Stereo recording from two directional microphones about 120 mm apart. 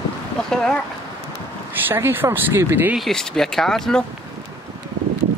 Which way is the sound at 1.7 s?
20° right (ahead or behind).